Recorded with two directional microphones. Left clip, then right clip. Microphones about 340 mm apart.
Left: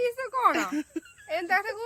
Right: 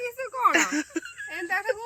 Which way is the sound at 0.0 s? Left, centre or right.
Centre.